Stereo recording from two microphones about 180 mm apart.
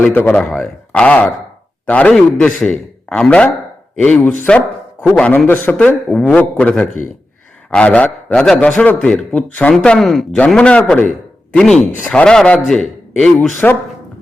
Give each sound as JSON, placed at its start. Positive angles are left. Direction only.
{"t": 0.0, "sound": "a man's voice", "side_deg": 10}
{"t": 11.8, "sound": "speech", "side_deg": 45}
{"t": 12.1, "sound": "a man's voice", "side_deg": 5}